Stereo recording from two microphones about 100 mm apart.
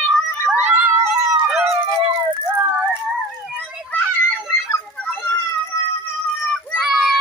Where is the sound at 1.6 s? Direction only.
20° right (ahead or behind).